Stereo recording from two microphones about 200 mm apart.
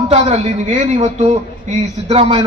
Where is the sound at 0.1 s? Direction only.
35° right (ahead or behind).